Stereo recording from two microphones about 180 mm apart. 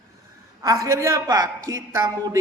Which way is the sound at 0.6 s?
20° right (ahead or behind).